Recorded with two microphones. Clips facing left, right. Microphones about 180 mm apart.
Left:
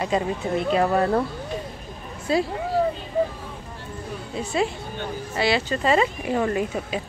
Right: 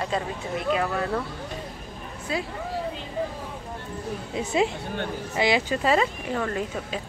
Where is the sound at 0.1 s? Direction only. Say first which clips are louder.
Left 6 dB; 15° left (ahead or behind).